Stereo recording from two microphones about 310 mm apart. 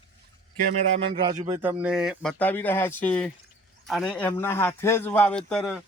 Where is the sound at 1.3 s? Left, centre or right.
Centre.